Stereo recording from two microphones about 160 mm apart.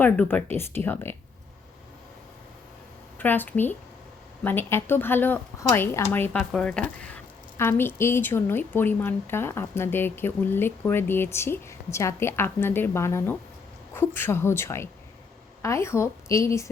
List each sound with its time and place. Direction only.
0.0 s a woman's voice: 10° left (ahead or behind)
3.2 s a woman's voice: 10° left (ahead or behind)